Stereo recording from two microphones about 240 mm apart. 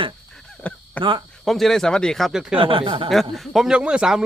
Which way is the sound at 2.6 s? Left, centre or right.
Right.